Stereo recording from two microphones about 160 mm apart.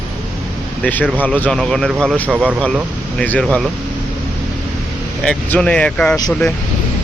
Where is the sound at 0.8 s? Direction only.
10° left (ahead or behind).